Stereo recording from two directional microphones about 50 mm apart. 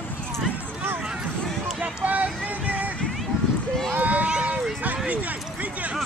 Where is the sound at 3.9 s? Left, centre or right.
Right.